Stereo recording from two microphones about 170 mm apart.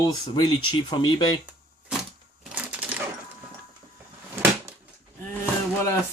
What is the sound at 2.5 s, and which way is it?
Cash register, 10° right (ahead or behind).